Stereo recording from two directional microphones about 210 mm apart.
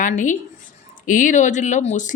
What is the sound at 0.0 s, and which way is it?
A woman's voice, 35° left (ahead or behind).